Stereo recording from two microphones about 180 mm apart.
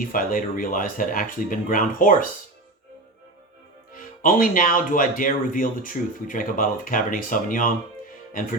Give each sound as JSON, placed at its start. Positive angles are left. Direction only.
{"t": 0.0, "sound": "speech", "side_deg": 50}
{"t": 3.9, "sound": "speech", "side_deg": 50}